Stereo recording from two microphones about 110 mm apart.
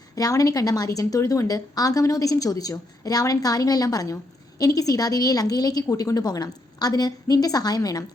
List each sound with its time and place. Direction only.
0.2 s a woman's voice: 30° left (ahead or behind)